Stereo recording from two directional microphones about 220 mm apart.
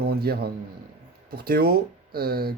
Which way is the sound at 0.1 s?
45° right (ahead or behind).